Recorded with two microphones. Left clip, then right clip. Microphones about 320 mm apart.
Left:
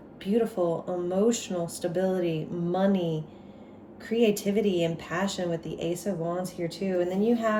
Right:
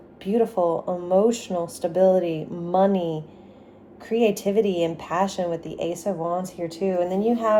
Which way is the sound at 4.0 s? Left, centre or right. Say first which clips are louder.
Right 4 dB; centre.